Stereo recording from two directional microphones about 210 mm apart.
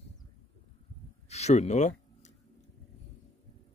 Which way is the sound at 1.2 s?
30° left (ahead or behind).